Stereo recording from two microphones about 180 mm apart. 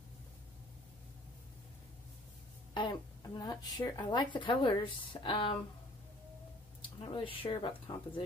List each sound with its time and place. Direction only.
2.7 s a woman's voice: 25° left (ahead or behind)
7.0 s a woman's voice: 30° left (ahead or behind)